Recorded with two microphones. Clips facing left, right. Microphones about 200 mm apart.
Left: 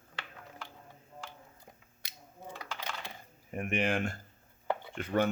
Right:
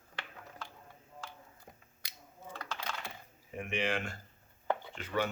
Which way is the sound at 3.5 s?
55° left (ahead or behind).